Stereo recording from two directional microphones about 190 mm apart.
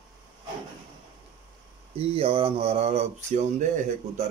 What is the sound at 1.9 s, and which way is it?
Speech, 30° right (ahead or behind).